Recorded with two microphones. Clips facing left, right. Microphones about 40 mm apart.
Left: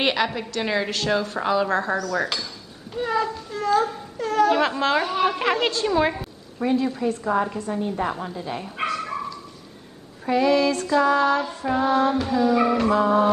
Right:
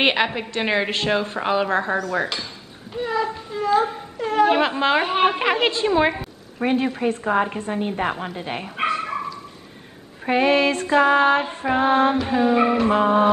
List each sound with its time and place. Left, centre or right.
0.0 s a woman's voice: right
2.9 s a child's voice: centre
3.5 s speech: centre; by 5.4 s right
5.4 s speech: right
6.6 s a woman's voice: right
8.8 s dog: right
10.2 s a woman's voice: right